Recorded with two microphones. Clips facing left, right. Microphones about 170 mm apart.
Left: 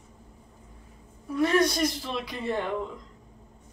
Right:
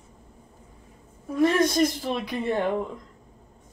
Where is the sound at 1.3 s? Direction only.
50° right (ahead or behind).